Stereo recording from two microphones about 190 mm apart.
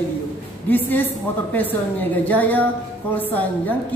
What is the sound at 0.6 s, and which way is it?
A woman's voice, 10° left (ahead or behind).